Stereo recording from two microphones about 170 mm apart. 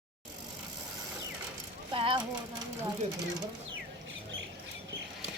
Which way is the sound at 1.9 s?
30° right (ahead or behind).